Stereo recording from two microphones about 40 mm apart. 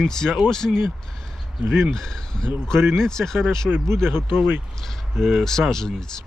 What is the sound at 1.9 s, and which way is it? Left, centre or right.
Speech, centre.